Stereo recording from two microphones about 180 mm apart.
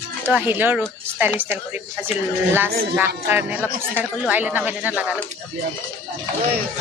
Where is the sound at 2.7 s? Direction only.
60° right (ahead or behind).